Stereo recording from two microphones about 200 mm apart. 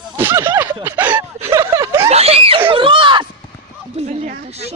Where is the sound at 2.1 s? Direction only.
30° right (ahead or behind).